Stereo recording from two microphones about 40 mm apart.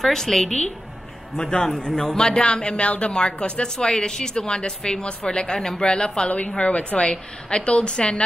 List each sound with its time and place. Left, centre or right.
0.0 s a woman's voice: centre